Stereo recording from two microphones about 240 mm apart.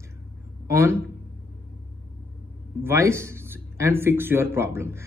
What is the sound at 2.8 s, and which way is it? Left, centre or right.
A man's voice, centre.